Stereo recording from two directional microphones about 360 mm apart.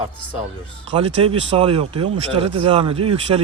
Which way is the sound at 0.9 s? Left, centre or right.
Centre.